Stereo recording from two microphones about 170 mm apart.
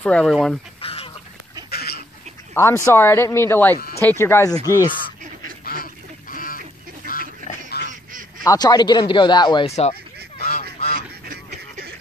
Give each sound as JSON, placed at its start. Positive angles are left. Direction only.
{"t": 0.0, "sound": "speech", "side_deg": 5}
{"t": 0.7, "sound": "fowl", "side_deg": 35}
{"t": 1.7, "sound": "duck", "side_deg": 65}
{"t": 2.5, "sound": "a woman's voice", "side_deg": 15}
{"t": 5.7, "sound": "duck", "side_deg": 55}
{"t": 7.9, "sound": "honk", "side_deg": -50}
{"t": 8.5, "sound": "speech", "side_deg": 25}
{"t": 9.7, "sound": "speech", "side_deg": 40}
{"t": 10.4, "sound": "goose", "side_deg": 60}
{"t": 11.0, "sound": "a sound", "side_deg": -55}